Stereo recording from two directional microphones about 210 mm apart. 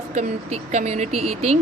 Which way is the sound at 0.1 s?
35° right (ahead or behind).